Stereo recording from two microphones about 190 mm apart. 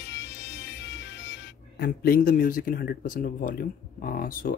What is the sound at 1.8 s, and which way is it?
Speech, 50° left (ahead or behind).